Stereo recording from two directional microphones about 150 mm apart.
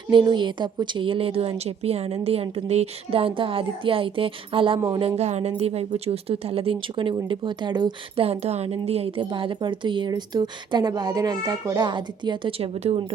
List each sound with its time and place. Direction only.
0.1 s speech: 30° right (ahead or behind)